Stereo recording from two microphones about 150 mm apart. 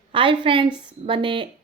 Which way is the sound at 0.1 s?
35° right (ahead or behind).